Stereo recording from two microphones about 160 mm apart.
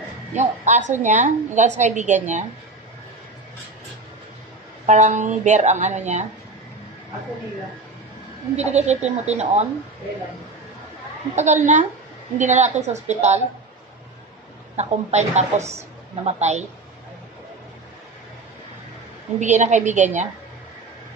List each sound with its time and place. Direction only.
0.4 s a woman's voice: 50° right (ahead or behind)
4.8 s a woman's voice: 50° right (ahead or behind)
8.5 s a woman's voice: 45° right (ahead or behind)
11.3 s a woman's voice: 45° right (ahead or behind)
14.8 s a woman's voice: 45° right (ahead or behind)
19.4 s a woman's voice: 50° right (ahead or behind)